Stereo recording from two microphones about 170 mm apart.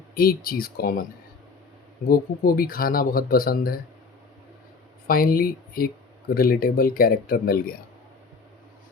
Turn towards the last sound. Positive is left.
turn(degrees=60)  # may be behind; listen again after turning